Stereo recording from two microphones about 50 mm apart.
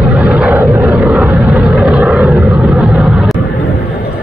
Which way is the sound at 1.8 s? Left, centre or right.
Right.